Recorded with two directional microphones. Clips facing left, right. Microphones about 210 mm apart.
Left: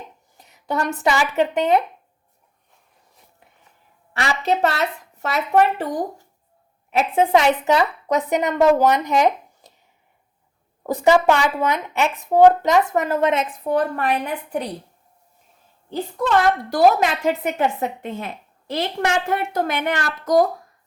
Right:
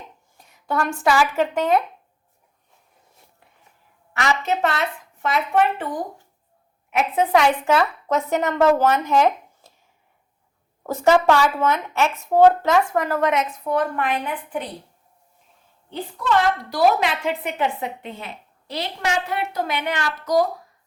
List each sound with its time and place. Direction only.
0.3 s speech: 20° left (ahead or behind)
4.1 s speech: 35° left (ahead or behind)
6.9 s speech: 25° left (ahead or behind)
10.8 s speech: 15° left (ahead or behind); by 14.7 s 40° left (ahead or behind)
16.2 s a woman's voice: 45° left (ahead or behind)